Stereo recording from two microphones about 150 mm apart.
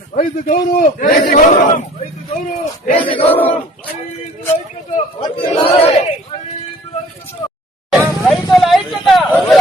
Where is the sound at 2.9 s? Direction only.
35° left (ahead or behind).